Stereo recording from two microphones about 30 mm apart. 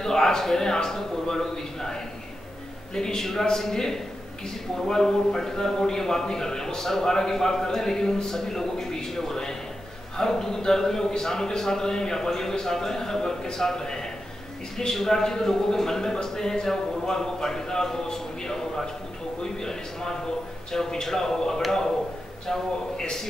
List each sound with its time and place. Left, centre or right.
0.0 s a man's voice: centre
18.0 s a sound: left
20.7 s a man's voice: centre